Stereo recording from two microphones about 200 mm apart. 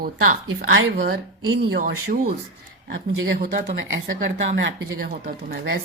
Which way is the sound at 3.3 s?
40° right (ahead or behind).